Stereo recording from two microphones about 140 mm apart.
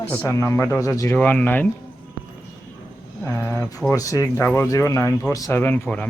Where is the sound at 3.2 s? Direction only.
20° left (ahead or behind).